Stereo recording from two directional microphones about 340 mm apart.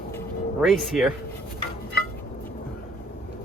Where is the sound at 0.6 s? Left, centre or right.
Centre.